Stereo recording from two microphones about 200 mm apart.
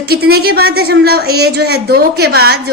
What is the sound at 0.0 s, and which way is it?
A woman's voice, 50° right (ahead or behind).